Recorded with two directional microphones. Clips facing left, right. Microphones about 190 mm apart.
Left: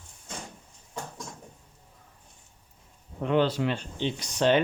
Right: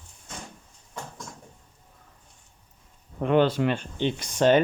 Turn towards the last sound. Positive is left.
turn(degrees=-45)  # may be behind; listen again after turning